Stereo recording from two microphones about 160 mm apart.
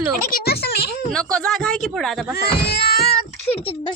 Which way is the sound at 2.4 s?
90° left.